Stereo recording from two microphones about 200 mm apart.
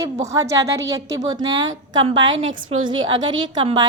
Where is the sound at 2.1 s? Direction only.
70° right (ahead or behind).